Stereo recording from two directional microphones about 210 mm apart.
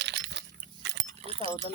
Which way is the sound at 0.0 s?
55° right (ahead or behind).